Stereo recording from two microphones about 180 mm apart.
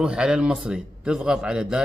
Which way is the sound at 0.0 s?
5° right (ahead or behind).